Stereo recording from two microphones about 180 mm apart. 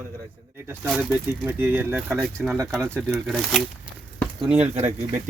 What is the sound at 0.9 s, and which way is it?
Speech, 5° right (ahead or behind).